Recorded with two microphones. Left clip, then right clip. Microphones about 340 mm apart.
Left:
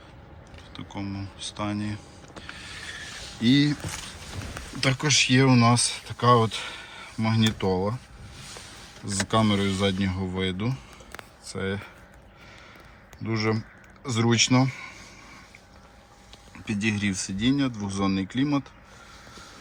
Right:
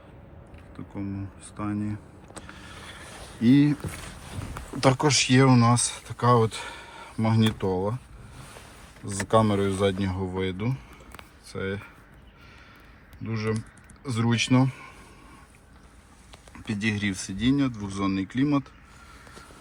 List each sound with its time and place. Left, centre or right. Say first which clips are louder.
0.7 s speech: left 1 dB; centre
2.4 s mechanisms: left 6 dB; centre
3.4 s speech: right 1 dB; centre
4.8 s speech: right 4 dB; centre
5.0 s speech: left 3 dB; centre
9.2 s speech: right 2 dB; centre
13.2 s speech: left 3 dB; centre
16.6 s speech: left 1 dB; centre